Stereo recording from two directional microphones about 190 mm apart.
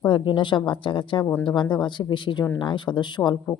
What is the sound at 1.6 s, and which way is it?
Speech, 25° left (ahead or behind).